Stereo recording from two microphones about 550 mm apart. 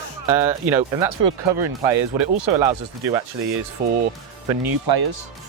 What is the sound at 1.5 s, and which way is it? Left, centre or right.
Speech, right.